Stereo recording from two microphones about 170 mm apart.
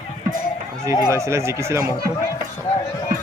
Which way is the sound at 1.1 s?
15° right (ahead or behind).